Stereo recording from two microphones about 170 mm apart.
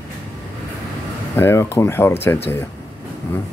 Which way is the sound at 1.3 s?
15° left (ahead or behind).